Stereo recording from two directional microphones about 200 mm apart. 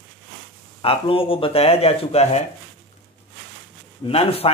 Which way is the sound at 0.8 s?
25° left (ahead or behind).